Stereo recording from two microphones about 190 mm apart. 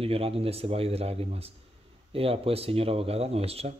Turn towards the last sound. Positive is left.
turn(degrees=-30)  # may be behind; listen again after turning